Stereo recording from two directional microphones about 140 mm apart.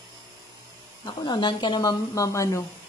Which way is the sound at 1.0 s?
35° left (ahead or behind).